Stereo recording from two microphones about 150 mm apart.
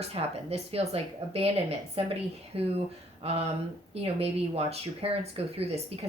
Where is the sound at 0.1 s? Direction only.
40° right (ahead or behind).